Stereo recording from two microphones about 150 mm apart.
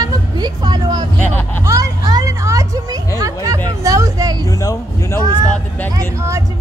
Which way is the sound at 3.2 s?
25° right (ahead or behind).